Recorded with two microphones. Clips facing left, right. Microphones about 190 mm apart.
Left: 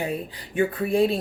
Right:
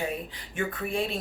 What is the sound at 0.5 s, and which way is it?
Speech, 35° left (ahead or behind).